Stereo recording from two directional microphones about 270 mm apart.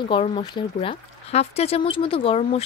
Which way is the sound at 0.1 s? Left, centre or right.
Centre.